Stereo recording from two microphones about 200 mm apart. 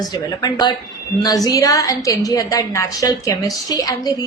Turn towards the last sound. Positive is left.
turn(degrees=20)  # may be behind; listen again after turning